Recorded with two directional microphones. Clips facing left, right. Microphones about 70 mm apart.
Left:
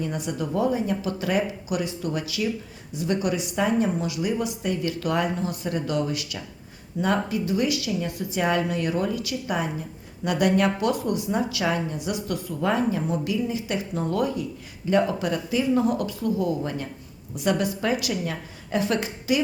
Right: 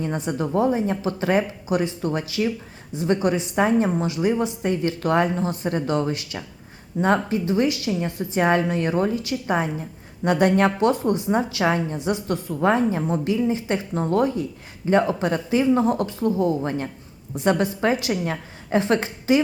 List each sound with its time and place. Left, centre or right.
0.0 s a woman's voice: right